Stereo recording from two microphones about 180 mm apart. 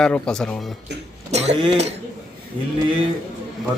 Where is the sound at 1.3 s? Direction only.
35° right (ahead or behind).